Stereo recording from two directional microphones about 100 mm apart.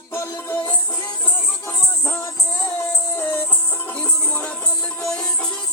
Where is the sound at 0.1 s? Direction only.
25° left (ahead or behind).